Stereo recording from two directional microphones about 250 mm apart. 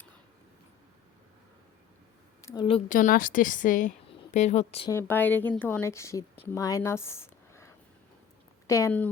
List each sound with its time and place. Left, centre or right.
2.5 s a woman's voice: centre
2.9 s a woman's voice: left
4.9 s speech: centre